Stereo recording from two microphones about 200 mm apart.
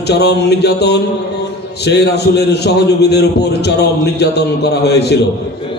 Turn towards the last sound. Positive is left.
turn(degrees=55)  # may be behind; listen again after turning